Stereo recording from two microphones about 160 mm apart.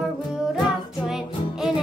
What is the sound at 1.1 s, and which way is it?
Music, 5° right (ahead or behind).